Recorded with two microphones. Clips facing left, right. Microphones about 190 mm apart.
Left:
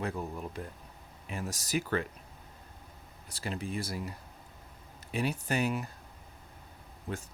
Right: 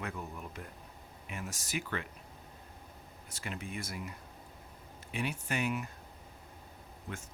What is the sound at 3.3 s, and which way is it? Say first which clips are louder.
Speech: left 5 dB; 35° left (ahead or behind).